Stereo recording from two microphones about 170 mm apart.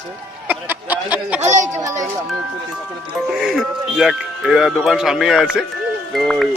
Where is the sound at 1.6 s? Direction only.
20° right (ahead or behind).